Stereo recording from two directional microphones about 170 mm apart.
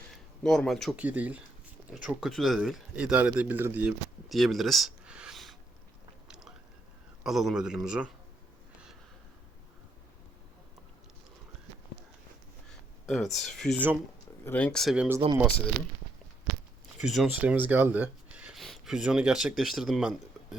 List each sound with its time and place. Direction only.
0.4 s speech: centre (ahead or behind)
1.0 s speech: 10° right (ahead or behind)
6.2 s chewing: 5° right (ahead or behind)
7.3 s speech: centre (ahead or behind)
13.1 s speech: centre (ahead or behind)
17.0 s speech: centre (ahead or behind)